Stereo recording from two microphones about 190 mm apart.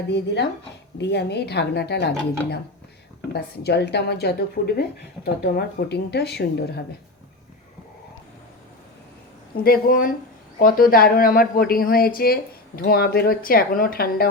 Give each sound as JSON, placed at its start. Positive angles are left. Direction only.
{"t": 0.9, "sound": "a woman's voice", "side_deg": 60}
{"t": 9.6, "sound": "speech", "side_deg": 50}